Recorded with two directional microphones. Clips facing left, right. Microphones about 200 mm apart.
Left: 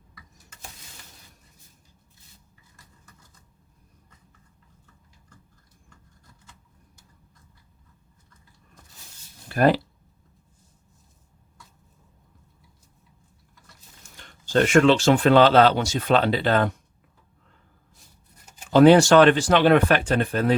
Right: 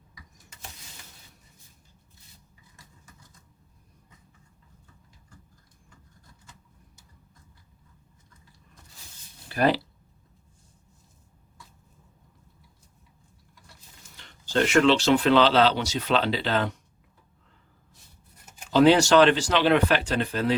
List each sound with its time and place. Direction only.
9.5 s speech: 50° left (ahead or behind)
14.2 s speech: 50° left (ahead or behind)
18.7 s speech: 50° left (ahead or behind)